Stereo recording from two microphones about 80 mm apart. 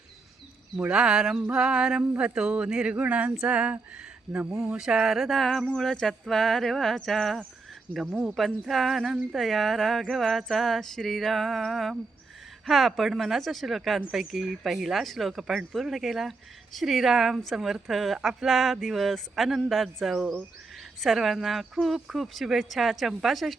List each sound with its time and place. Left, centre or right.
0.8 s a woman's voice: centre
8.1 s speech: centre
8.4 s a woman's voice: centre